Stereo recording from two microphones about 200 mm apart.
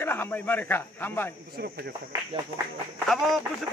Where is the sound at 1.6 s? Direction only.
55° right (ahead or behind).